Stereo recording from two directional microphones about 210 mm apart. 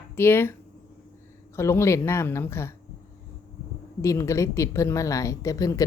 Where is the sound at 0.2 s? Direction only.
10° left (ahead or behind).